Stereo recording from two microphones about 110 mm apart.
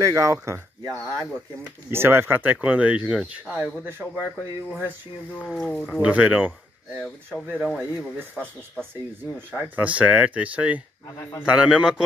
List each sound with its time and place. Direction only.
0.0 s speech: 30° right (ahead or behind)
5.3 s speech: 5° left (ahead or behind)
6.0 s speech: 10° right (ahead or behind)